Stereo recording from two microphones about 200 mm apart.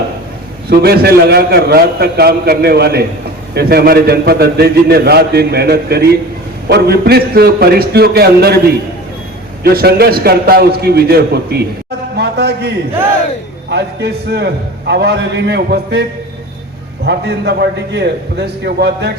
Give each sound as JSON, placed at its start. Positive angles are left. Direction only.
{"t": 0.7, "sound": "a man's voice", "side_deg": -50}
{"t": 12.1, "sound": "a sound", "side_deg": -55}
{"t": 13.7, "sound": "a man's voice", "side_deg": -55}
{"t": 17.1, "sound": "a man's voice", "side_deg": -55}